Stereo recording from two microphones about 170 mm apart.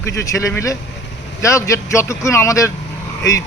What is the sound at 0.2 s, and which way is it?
Speech, 15° left (ahead or behind).